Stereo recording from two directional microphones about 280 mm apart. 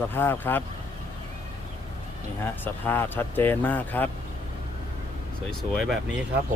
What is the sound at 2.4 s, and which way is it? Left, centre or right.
Speech, centre.